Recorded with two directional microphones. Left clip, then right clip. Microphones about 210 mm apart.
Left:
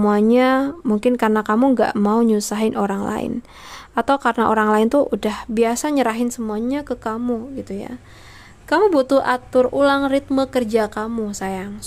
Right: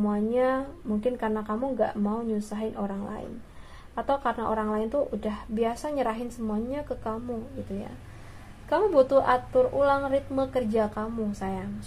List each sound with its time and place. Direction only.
0.0 s speech: 50° left (ahead or behind)
8.6 s speech: 45° left (ahead or behind)